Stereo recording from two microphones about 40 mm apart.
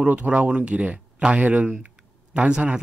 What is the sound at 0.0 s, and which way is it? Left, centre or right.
Speech, right.